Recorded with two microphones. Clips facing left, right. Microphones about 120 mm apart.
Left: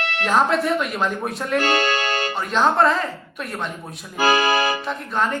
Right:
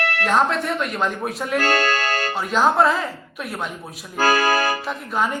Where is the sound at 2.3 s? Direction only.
5° right (ahead or behind).